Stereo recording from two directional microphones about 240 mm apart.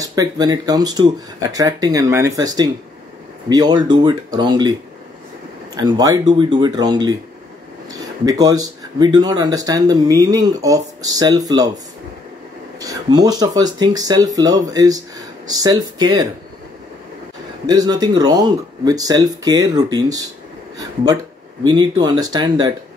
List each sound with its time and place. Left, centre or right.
0.0 s speech: centre
5.8 s speech: centre
12.8 s speech: centre
17.6 s speech: centre